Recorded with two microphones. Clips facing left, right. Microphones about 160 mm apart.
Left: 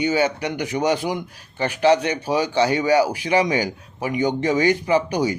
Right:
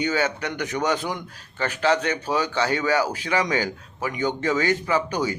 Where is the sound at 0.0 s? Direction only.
10° left (ahead or behind).